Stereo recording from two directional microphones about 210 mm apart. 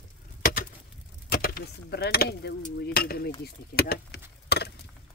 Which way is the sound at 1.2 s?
45° left (ahead or behind).